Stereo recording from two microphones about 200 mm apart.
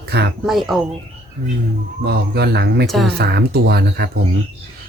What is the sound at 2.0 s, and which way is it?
Speech, 55° right (ahead or behind).